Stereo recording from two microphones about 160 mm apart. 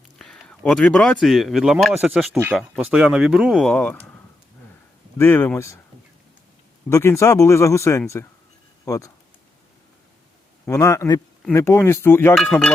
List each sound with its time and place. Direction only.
0.2 s speech: 5° left (ahead or behind)
5.1 s speech: 15° left (ahead or behind)
6.9 s speech: 15° left (ahead or behind)
10.7 s speech: 20° left (ahead or behind)
12.4 s speech: centre (ahead or behind)